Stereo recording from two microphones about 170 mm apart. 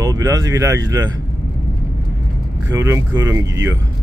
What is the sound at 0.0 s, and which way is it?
Speech, 20° right (ahead or behind).